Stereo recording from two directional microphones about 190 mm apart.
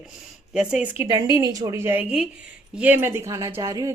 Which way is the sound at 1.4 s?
20° right (ahead or behind).